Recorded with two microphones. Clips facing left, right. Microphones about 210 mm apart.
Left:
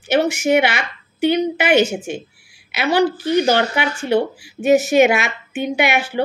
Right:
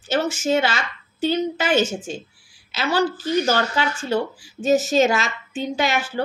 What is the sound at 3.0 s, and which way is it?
Speech, 65° left (ahead or behind).